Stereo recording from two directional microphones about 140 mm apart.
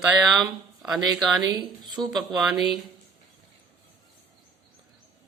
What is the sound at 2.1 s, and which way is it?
Speech, centre (ahead or behind).